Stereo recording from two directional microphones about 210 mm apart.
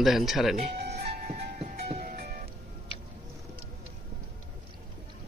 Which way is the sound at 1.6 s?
30° right (ahead or behind).